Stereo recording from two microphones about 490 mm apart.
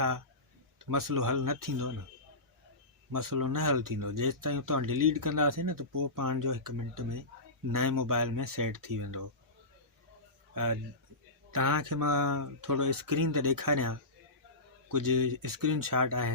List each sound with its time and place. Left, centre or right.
0.8 s speech: right
3.1 s speech: right
10.5 s a man's voice: right